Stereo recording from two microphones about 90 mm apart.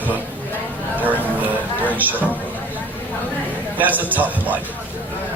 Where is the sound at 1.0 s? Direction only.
20° right (ahead or behind).